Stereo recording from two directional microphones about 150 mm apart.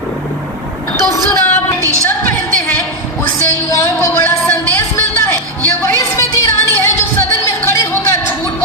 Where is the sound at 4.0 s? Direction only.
15° left (ahead or behind).